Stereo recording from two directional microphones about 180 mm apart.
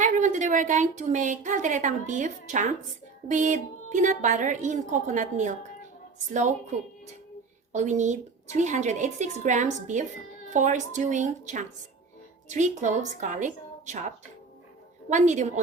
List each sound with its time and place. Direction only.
0.0 s a woman's voice: 45° right (ahead or behind)
15.1 s a woman's voice: 40° right (ahead or behind)